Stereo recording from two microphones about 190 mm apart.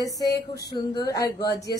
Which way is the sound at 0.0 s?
20° left (ahead or behind).